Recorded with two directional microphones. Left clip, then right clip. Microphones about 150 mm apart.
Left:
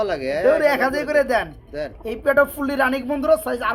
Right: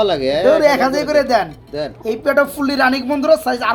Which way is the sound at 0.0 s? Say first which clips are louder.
Right 7 dB; 40° right (ahead or behind).